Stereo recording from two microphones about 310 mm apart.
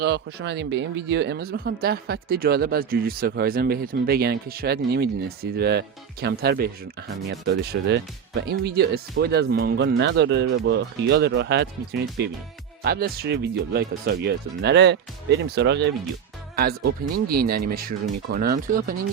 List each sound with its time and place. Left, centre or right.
0.0 s speech: right